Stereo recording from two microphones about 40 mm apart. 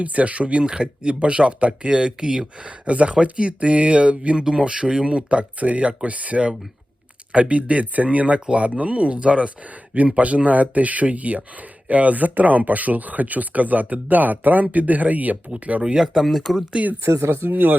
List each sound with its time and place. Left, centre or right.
0.0 s speech: right
16.2 s speech: centre
17.0 s speech: right